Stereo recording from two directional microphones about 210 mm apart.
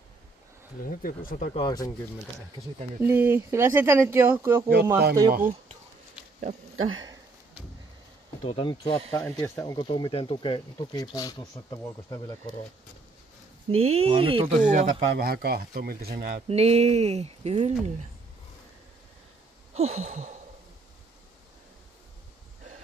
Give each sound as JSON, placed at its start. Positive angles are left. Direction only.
{"t": 0.8, "sound": "speech", "side_deg": 40}
{"t": 1.5, "sound": "speech", "side_deg": 20}
{"t": 3.0, "sound": "speech", "side_deg": -10}
{"t": 5.3, "sound": "speech", "side_deg": -40}
{"t": 8.5, "sound": "speech", "side_deg": 25}
{"t": 9.1, "sound": "speech", "side_deg": 15}
{"t": 13.7, "sound": "speech", "side_deg": -30}
{"t": 14.6, "sound": "speech", "side_deg": -40}
{"t": 16.4, "sound": "speech", "side_deg": -30}
{"t": 19.7, "sound": "a sound", "side_deg": -30}